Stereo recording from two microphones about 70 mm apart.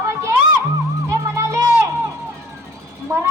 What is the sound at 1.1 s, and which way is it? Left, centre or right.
Music, right.